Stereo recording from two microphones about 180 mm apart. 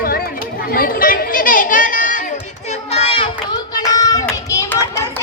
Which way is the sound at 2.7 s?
35° left (ahead or behind).